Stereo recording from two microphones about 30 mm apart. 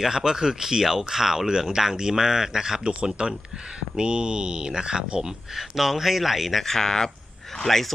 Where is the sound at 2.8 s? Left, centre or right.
Right.